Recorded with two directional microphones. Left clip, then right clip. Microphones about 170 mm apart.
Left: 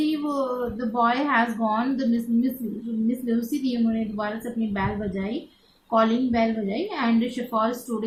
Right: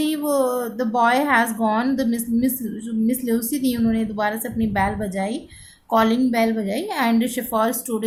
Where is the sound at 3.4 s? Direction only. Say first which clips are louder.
Right 3 dB; 60° right (ahead or behind).